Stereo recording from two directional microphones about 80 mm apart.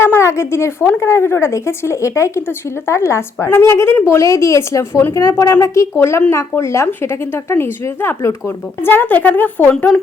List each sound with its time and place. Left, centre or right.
0.0 s a woman's voice: left